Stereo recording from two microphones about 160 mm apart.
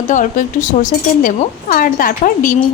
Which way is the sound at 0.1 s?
55° left (ahead or behind).